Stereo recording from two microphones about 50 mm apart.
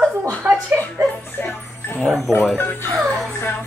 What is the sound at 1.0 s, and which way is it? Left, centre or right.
Music, right.